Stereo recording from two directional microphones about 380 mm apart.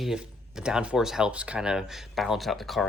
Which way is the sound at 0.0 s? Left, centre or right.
Centre.